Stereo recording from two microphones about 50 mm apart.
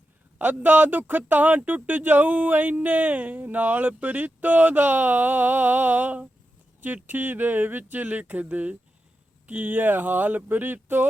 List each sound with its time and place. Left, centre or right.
0.3 s speech: right